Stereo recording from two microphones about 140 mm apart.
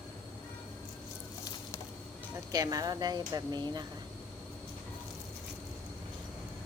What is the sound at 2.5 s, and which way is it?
Speech, 25° right (ahead or behind).